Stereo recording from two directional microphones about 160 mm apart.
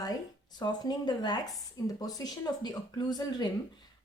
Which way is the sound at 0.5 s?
25° left (ahead or behind).